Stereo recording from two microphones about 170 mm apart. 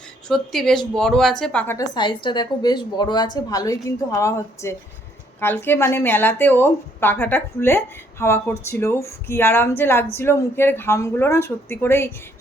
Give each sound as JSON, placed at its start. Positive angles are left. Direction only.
{"t": 0.3, "sound": "speech", "side_deg": 0}
{"t": 1.6, "sound": "speech", "side_deg": 15}
{"t": 2.0, "sound": "a woman's voice", "side_deg": 30}